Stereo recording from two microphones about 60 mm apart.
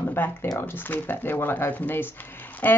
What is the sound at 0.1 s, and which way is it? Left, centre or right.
Speech, left.